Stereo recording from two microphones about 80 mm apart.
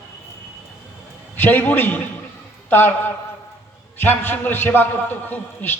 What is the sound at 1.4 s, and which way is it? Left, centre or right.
A man's voice, left.